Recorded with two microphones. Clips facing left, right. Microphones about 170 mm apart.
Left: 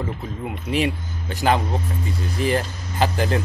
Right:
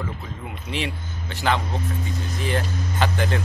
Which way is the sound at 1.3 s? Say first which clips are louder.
Left 4 dB; 40° left (ahead or behind).